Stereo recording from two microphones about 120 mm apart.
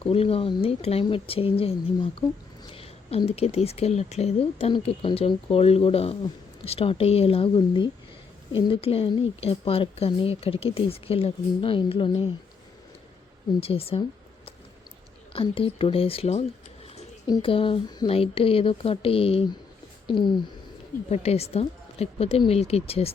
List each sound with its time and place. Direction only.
0.0 s a woman's voice: 55° left (ahead or behind)
13.6 s speech: 55° left (ahead or behind)
15.3 s speech: 50° left (ahead or behind)
17.4 s speech: 50° left (ahead or behind)
20.1 s speech: 40° left (ahead or behind)
21.1 s a woman's voice: 60° left (ahead or behind)